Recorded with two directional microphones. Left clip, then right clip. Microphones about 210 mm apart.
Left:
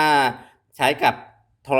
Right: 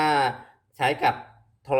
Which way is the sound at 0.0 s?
40° left (ahead or behind).